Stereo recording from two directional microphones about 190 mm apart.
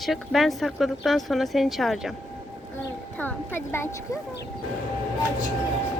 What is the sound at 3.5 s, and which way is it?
Speech, 15° left (ahead or behind).